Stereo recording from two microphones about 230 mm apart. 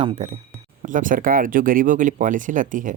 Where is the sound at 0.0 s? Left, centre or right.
Right.